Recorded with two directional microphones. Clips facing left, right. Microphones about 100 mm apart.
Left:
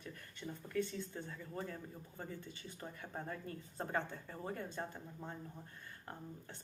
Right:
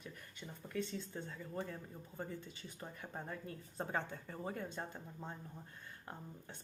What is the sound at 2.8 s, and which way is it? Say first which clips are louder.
Speech: left 1 dB; 15° right (ahead or behind).